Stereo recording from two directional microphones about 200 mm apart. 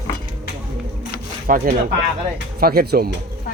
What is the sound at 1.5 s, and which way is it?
Speech, 45° right (ahead or behind).